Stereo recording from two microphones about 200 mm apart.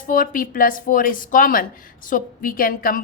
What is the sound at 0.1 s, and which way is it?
A woman's voice, 45° left (ahead or behind).